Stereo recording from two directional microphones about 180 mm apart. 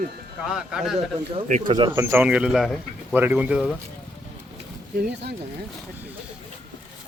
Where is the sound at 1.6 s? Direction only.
25° right (ahead or behind).